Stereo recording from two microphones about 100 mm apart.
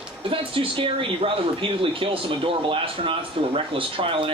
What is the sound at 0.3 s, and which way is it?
Speech, 60° right (ahead or behind).